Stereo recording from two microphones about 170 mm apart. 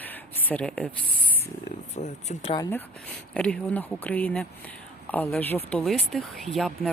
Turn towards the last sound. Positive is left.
turn(degrees=0)  # may be behind; listen again after turning